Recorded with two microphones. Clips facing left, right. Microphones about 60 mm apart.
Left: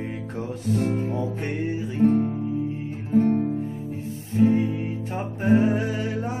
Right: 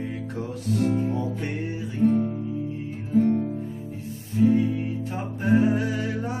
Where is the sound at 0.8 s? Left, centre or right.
Left.